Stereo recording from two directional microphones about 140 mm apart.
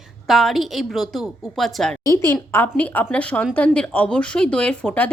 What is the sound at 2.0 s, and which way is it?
A woman's voice, 20° left (ahead or behind).